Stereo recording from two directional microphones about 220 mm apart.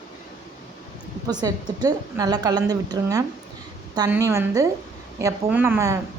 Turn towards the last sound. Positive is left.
turn(degrees=-10)  # may be behind; listen again after turning